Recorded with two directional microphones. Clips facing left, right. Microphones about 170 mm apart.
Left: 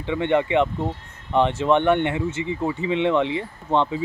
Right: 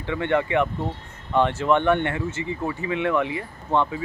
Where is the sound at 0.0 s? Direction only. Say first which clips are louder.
Left 2 dB; 20° left (ahead or behind).